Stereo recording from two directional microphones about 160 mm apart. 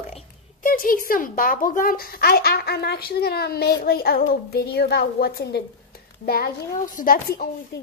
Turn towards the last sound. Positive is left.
turn(degrees=65)  # may be behind; listen again after turning